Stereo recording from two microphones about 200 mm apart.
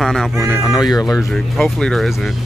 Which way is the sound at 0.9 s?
15° left (ahead or behind).